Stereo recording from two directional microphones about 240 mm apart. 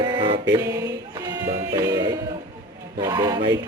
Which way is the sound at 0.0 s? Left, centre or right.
Centre.